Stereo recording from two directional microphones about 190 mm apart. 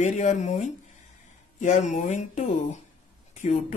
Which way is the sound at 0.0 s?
40° left (ahead or behind).